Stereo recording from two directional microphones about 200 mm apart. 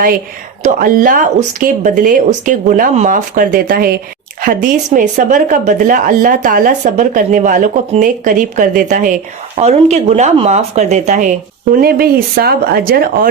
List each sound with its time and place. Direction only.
0.6 s a woman's voice: 45° right (ahead or behind)